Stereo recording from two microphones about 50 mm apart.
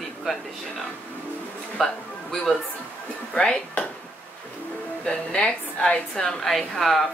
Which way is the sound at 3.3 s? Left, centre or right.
Centre.